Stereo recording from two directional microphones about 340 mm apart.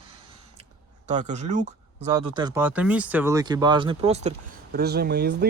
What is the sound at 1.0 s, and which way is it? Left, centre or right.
Speech, right.